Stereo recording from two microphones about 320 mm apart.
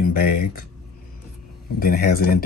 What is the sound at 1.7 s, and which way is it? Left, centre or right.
Speech, left.